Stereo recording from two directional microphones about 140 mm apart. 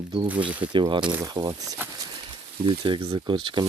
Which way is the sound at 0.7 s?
35° right (ahead or behind).